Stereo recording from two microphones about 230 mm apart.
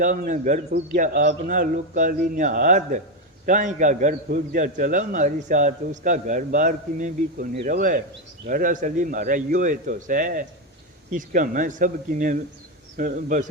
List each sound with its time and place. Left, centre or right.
0.0 s a man's voice: right